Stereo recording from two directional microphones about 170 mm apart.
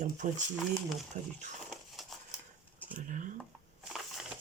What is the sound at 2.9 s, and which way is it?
Speech, 50° right (ahead or behind).